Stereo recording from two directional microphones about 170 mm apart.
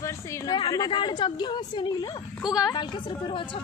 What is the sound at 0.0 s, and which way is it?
A woman's voice, 20° left (ahead or behind).